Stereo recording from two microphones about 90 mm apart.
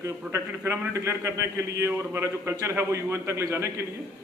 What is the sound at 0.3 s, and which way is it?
A man's voice, 30° right (ahead or behind).